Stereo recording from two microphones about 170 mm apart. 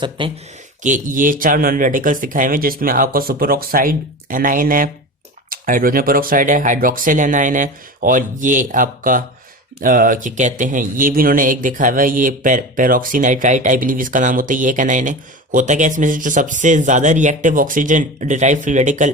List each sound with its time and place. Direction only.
0.2 s speech: 30° right (ahead or behind)
0.8 s speech: 50° right (ahead or behind)